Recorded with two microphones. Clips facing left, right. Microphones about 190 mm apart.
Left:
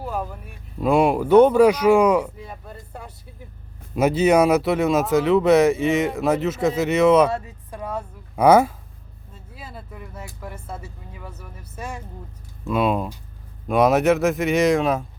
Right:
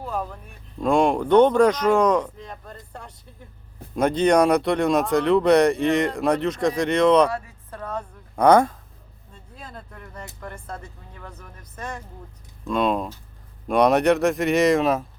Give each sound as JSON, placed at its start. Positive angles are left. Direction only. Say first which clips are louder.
{"t": 0.0, "sound": "speech", "louder": "left 1 dB", "side_deg": 5}
{"t": 7.3, "sound": "speech", "louder": "left 3 dB", "side_deg": 25}
{"t": 7.7, "sound": "a sound", "louder": "left 2 dB", "side_deg": 10}
{"t": 10.4, "sound": "speech", "louder": "left 1 dB", "side_deg": 5}